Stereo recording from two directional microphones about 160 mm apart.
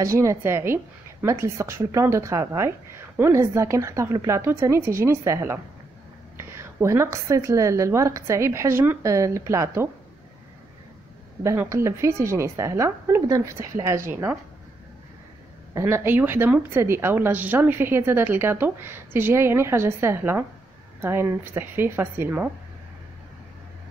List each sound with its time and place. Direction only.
0.0 s a woman's voice: 20° right (ahead or behind)
11.4 s a woman's voice: 20° right (ahead or behind)
15.7 s a woman's voice: 15° right (ahead or behind)